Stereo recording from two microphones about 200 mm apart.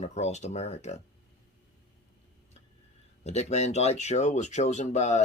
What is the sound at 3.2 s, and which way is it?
Speech, 35° left (ahead or behind).